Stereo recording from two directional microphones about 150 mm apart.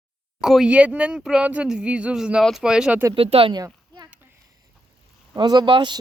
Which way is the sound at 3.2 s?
40° right (ahead or behind).